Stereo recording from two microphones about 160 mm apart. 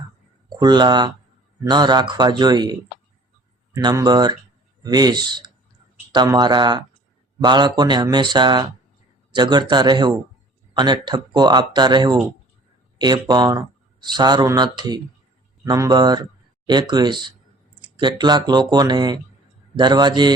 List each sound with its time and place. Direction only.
0.5 s speech: 25° right (ahead or behind)